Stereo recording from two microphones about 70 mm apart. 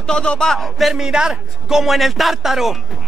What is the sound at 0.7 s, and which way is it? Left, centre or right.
Speech, centre.